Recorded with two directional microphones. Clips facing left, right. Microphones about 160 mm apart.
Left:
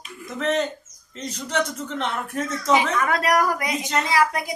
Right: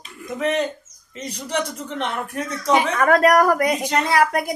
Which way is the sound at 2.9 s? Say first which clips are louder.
Right 6 dB; 50° right (ahead or behind).